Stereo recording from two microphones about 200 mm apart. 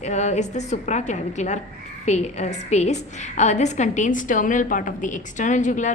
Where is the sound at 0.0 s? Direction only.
35° left (ahead or behind).